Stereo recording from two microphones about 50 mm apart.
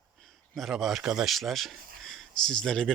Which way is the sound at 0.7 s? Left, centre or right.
Centre.